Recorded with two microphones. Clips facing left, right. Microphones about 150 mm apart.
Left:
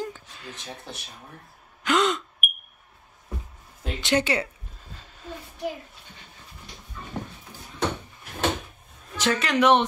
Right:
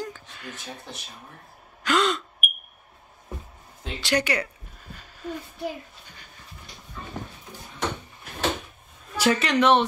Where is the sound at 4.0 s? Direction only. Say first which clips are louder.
Left 1 dB; 25° left (ahead or behind).